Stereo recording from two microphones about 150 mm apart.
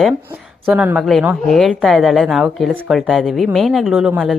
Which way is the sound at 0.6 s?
10° right (ahead or behind).